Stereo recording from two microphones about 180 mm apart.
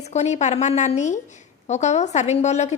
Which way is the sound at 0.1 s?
40° left (ahead or behind).